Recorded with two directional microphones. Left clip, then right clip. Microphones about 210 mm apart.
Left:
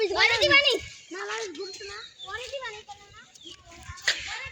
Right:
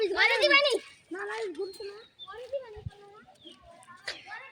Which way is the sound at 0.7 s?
40° left (ahead or behind).